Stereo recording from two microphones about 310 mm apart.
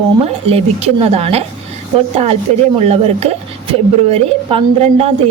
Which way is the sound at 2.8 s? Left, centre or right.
Centre.